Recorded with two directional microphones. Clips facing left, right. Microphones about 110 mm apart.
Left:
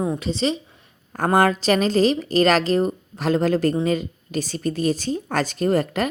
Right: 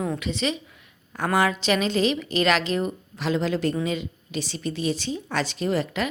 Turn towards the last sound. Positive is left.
turn(degrees=45)  # may be behind; listen again after turning